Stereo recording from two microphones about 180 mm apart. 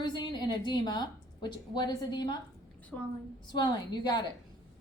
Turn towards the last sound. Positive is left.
turn(degrees=25)  # may be behind; listen again after turning